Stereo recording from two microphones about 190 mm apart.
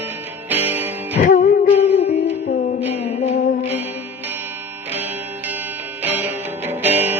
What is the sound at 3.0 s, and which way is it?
Music, 35° left (ahead or behind).